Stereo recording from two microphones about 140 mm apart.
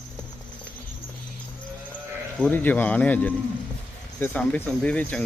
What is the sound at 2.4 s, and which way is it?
Speech, 15° left (ahead or behind).